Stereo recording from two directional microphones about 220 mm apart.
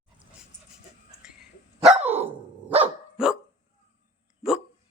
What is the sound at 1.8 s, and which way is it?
Dog, 30° right (ahead or behind).